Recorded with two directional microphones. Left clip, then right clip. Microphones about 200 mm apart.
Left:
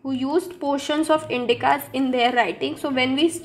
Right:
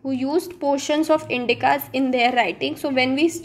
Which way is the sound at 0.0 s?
20° right (ahead or behind).